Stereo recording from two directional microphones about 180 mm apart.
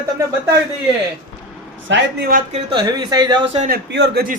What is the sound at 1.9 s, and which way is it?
Speech, 90° right.